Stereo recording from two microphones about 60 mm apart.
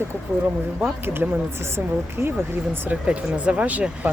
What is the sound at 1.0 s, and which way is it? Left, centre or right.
Speech, right.